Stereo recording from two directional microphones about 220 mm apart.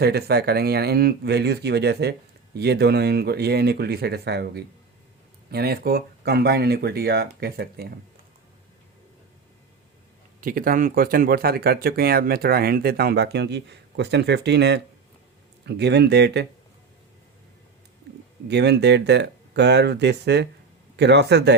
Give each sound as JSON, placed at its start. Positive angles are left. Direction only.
{"t": 0.0, "sound": "speech", "side_deg": -45}
{"t": 10.4, "sound": "speech", "side_deg": -40}
{"t": 18.4, "sound": "speech", "side_deg": -50}